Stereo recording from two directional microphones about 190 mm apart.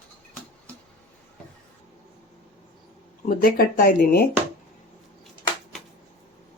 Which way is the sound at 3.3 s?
50° left (ahead or behind).